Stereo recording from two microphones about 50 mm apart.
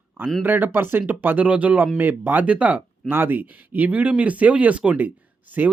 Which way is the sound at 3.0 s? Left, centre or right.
Right.